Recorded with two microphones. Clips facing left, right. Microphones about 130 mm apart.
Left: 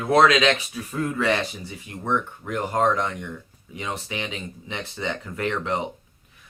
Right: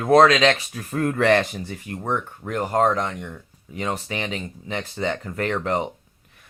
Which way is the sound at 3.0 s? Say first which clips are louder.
Even; 30° right (ahead or behind).